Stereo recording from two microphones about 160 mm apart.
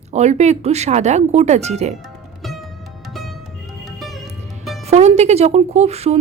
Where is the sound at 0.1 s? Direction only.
45° right (ahead or behind).